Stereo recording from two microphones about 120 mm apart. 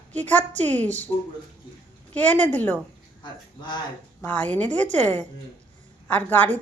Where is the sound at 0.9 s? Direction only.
15° left (ahead or behind).